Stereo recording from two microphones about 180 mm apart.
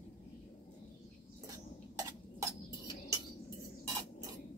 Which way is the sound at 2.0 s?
20° right (ahead or behind).